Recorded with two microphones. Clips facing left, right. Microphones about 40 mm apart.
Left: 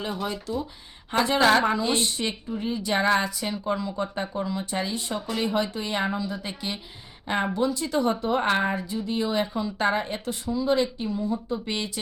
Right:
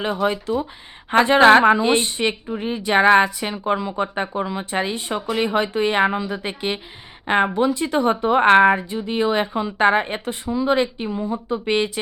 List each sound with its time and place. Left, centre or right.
0.0 s a woman's voice: right